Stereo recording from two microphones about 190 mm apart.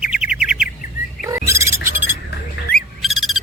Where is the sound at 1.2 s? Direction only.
15° right (ahead or behind).